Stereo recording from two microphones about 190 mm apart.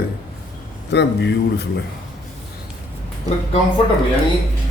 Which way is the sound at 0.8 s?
65° left (ahead or behind).